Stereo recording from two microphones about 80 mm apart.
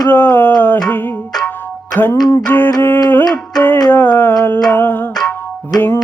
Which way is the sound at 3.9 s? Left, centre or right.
Left.